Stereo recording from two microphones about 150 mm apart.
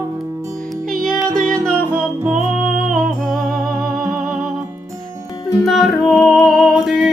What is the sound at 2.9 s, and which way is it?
Music, 5° left (ahead or behind).